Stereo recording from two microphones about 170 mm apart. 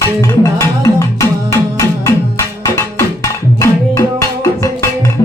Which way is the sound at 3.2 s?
20° left (ahead or behind).